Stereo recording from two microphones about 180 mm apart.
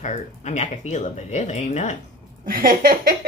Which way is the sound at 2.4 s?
55° right (ahead or behind).